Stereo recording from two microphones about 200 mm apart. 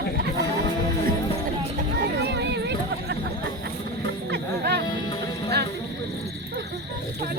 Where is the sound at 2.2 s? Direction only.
60° right (ahead or behind).